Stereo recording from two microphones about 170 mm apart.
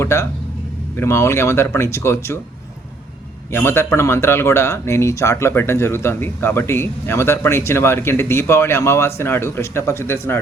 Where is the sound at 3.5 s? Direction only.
15° left (ahead or behind).